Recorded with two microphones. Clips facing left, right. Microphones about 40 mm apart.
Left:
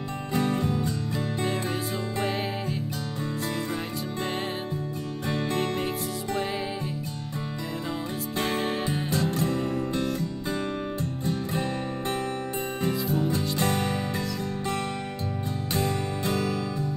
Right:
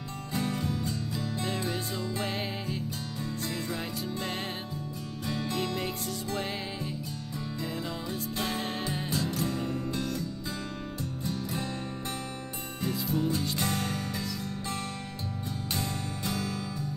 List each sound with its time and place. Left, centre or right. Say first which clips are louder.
0.3 s music: left 6 dB; left
5.3 s music: left 4 dB; left
8.4 s music: left 6 dB; left
8.6 s music: left 5 dB; left
9.1 s music: left 5 dB; left
12.8 s music: left 2 dB; left
15.7 s music: left 8 dB; left